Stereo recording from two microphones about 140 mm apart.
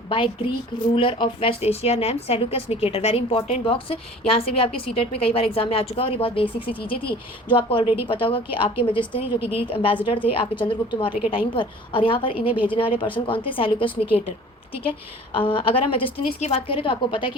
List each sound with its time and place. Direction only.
0.9 s a woman's voice: 40° left (ahead or behind)